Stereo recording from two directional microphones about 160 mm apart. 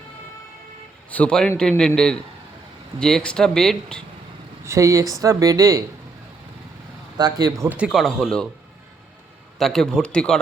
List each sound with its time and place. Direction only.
1.1 s speech: 5° left (ahead or behind)
3.0 s speech: 5° left (ahead or behind)
4.6 s speech: 20° right (ahead or behind)
7.2 s speech: 25° right (ahead or behind)
7.7 s speech: 5° right (ahead or behind)
9.6 s speech: centre (ahead or behind)